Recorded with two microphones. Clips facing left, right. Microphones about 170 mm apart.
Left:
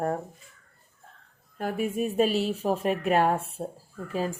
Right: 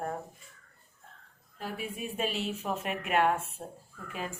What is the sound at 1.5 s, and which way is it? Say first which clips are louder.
A woman's voice: left 10 dB; 50° left (ahead or behind).